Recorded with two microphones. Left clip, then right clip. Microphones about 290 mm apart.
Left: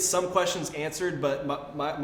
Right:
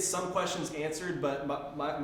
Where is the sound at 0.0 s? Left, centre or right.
Left.